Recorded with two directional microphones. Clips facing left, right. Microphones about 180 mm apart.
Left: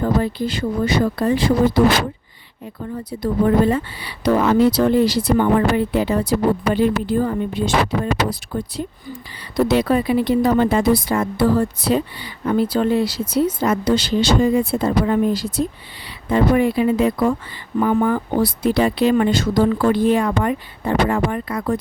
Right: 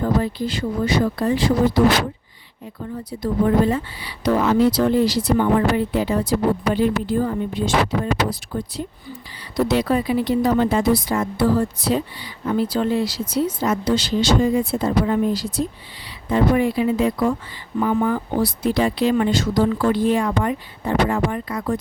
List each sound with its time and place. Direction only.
0.0 s speech: 60° left (ahead or behind)
3.7 s speech: 60° left (ahead or behind)